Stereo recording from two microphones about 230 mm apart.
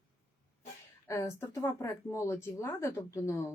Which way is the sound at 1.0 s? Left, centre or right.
Centre.